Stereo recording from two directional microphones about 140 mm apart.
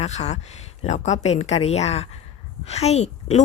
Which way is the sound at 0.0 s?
55° left (ahead or behind).